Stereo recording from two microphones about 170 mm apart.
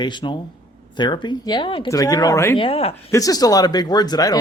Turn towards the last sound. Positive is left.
turn(degrees=20)  # may be behind; listen again after turning